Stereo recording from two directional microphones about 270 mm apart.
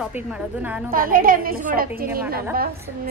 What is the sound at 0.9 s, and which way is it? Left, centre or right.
A woman's voice, right.